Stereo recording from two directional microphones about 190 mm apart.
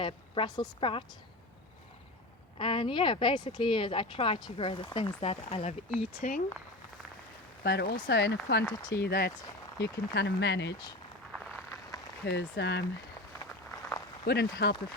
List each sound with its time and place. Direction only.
0.0 s speech: 25° left (ahead or behind)
2.6 s speech: 25° left (ahead or behind)
7.6 s speech: 60° left (ahead or behind)
11.3 s a sound: centre (ahead or behind)
12.2 s speech: 65° left (ahead or behind)
13.5 s a sound: 10° left (ahead or behind)
14.3 s speech: 60° left (ahead or behind)